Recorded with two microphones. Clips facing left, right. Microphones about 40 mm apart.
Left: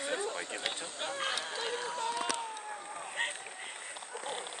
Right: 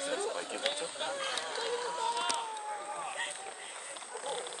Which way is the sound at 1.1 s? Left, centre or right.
Left.